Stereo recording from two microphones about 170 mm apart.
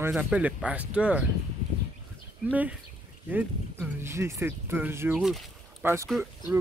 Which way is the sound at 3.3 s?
10° right (ahead or behind).